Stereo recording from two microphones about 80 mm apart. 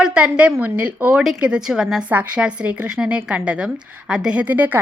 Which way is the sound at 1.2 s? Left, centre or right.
Centre.